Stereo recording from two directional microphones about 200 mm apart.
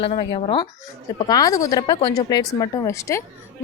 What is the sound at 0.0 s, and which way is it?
Speech, 25° left (ahead or behind).